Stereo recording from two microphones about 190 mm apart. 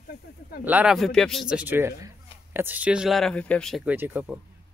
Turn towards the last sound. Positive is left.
turn(degrees=-10)  # may be behind; listen again after turning